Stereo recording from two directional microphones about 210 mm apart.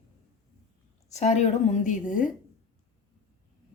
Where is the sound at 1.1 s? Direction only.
30° left (ahead or behind).